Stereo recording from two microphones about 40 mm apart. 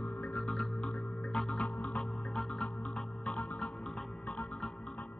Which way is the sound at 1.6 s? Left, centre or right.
Left.